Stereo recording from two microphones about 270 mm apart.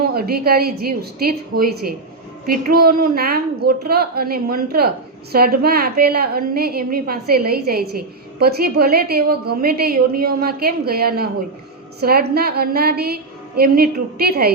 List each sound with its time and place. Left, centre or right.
0.0 s a woman's voice: right